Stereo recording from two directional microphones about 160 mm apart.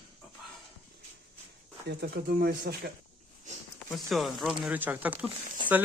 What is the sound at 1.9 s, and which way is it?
Speech, 80° right.